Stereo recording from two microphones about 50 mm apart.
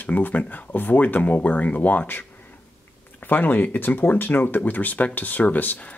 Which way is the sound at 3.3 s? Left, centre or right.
Left.